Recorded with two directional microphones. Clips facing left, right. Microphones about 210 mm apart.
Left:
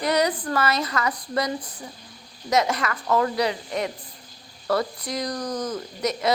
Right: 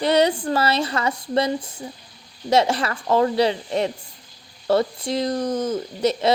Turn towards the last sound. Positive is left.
turn(degrees=-30)  # may be behind; listen again after turning